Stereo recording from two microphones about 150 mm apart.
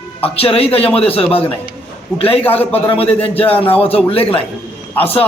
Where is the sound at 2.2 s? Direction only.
40° left (ahead or behind).